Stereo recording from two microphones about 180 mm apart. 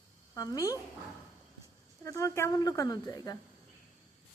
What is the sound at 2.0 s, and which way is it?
A woman's voice, 15° left (ahead or behind).